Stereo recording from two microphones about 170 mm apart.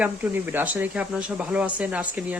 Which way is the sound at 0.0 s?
10° right (ahead or behind).